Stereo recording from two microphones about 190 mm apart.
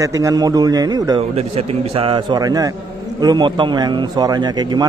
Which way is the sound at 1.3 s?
30° right (ahead or behind).